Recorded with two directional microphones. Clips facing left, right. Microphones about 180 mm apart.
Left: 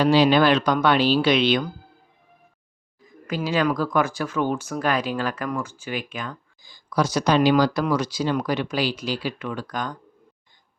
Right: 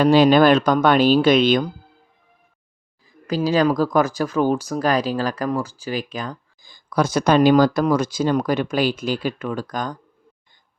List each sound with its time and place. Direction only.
0.0 s speech: 50° right (ahead or behind)
3.0 s speech: 35° right (ahead or behind)